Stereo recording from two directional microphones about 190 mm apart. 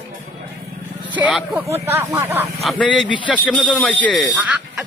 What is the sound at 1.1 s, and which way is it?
Speech, 5° right (ahead or behind).